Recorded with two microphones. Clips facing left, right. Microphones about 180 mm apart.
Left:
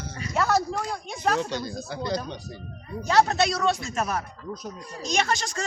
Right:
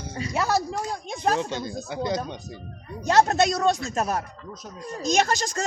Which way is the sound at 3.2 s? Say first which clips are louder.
Right 2 dB; 45° right (ahead or behind).